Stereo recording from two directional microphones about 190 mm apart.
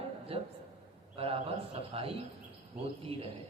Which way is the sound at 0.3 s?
30° right (ahead or behind).